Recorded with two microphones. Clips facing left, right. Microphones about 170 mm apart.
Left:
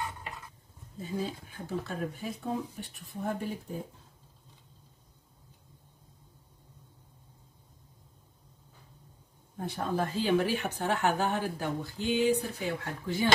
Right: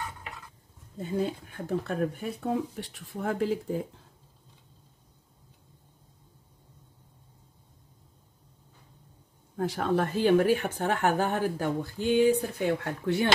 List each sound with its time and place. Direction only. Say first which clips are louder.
0.9 s speech: right 5 dB; 60° right (ahead or behind); by 3.8 s 90° right
9.6 s speech: right 5 dB; 90° right; by 13.3 s 65° right (ahead or behind)